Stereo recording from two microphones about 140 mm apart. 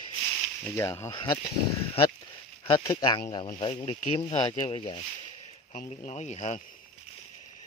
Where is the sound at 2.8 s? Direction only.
30° left (ahead or behind).